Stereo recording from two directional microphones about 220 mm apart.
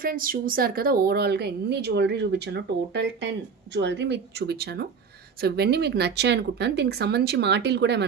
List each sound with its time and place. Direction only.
0.0 s a woman's voice: 40° right (ahead or behind)